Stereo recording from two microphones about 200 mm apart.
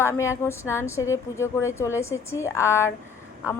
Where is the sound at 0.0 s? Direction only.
15° left (ahead or behind).